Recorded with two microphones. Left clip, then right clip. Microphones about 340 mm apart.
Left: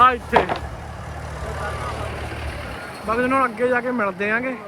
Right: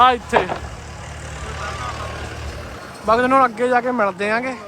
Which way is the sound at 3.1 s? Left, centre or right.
Centre.